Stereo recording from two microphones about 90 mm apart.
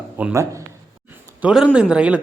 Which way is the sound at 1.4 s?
15° right (ahead or behind).